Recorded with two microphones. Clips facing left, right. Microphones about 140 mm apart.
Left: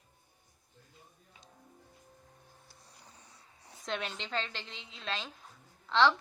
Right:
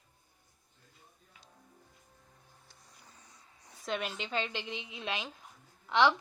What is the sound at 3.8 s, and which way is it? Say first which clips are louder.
A woman's voice: right 2 dB; 5° right (ahead or behind).